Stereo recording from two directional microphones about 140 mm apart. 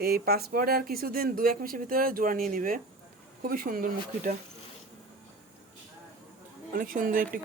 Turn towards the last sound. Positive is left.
turn(degrees=-85)